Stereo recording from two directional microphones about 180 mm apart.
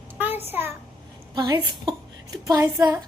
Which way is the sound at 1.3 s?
25° right (ahead or behind).